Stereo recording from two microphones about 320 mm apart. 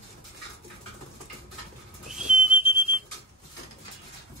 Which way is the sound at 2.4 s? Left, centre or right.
Right.